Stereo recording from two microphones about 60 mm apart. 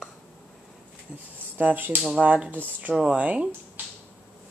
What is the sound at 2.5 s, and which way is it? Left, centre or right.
Speech, right.